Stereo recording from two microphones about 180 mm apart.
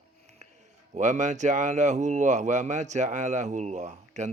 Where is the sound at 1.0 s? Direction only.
40° right (ahead or behind).